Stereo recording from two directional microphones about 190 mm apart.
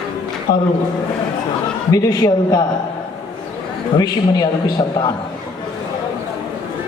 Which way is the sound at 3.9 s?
20° left (ahead or behind).